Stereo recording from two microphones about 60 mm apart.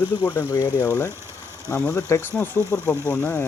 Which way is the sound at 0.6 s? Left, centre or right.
Left.